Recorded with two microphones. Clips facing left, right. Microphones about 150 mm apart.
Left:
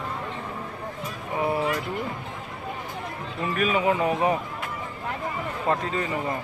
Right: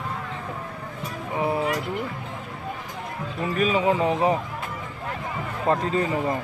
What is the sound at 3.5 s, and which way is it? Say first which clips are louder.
Speech: right 2 dB; 30° right (ahead or behind).